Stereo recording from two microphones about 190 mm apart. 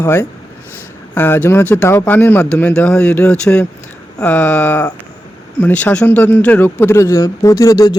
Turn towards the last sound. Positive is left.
turn(degrees=20)  # may be behind; listen again after turning